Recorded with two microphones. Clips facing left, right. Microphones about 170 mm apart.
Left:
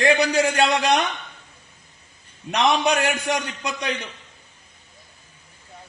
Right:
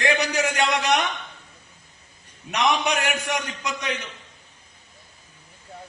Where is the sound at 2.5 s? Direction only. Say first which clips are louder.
Left 3 dB; 35° left (ahead or behind).